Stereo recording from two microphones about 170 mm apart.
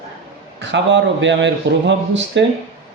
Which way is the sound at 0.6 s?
90° right.